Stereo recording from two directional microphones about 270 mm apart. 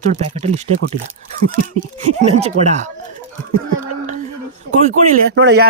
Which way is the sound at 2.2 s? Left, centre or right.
Right.